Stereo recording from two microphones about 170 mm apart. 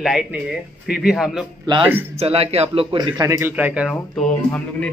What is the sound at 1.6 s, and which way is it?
A man's voice, 30° right (ahead or behind).